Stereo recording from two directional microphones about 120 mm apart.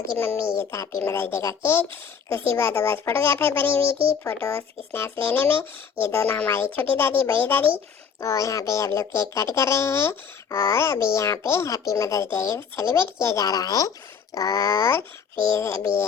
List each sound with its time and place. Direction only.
0.2 s a child's voice: 20° left (ahead or behind)